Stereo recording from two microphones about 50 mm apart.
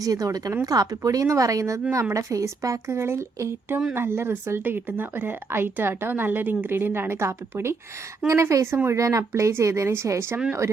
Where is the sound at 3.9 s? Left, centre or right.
Right.